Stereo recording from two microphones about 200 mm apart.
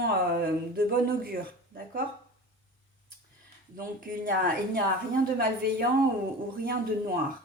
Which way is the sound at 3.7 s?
45° right (ahead or behind).